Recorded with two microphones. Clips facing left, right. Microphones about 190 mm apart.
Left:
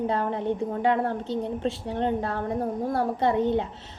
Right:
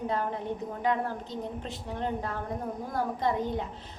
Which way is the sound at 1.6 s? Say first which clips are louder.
Left 8 dB; 30° left (ahead or behind).